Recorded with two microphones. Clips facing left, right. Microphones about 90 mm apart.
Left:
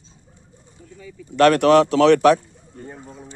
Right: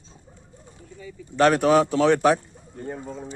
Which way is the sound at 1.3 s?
80° left.